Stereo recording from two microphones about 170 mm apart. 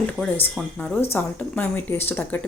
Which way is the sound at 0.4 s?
5° left (ahead or behind).